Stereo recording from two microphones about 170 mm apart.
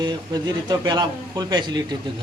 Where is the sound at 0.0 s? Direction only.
25° right (ahead or behind).